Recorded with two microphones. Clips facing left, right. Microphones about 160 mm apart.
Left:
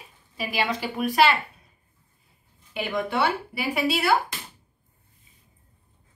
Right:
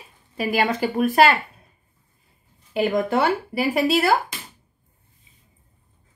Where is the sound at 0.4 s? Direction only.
50° right (ahead or behind).